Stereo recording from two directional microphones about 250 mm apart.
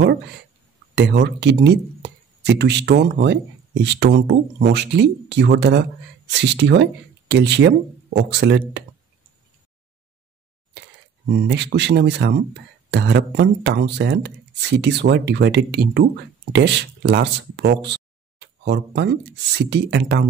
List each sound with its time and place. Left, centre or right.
0.9 s speech: right
11.3 s speech: right